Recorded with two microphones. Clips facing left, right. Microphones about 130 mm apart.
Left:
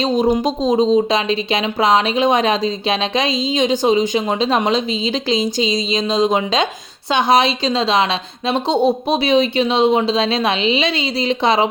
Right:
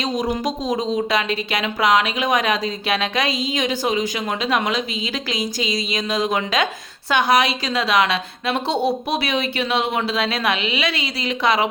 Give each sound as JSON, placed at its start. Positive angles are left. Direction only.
{"t": 0.0, "sound": "speech", "side_deg": 25}